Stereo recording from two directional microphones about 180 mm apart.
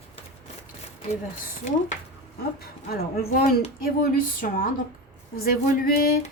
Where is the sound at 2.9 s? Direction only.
50° left (ahead or behind).